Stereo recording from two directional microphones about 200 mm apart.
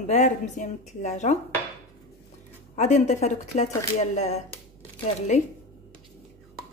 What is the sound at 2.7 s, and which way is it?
Speech, 35° left (ahead or behind).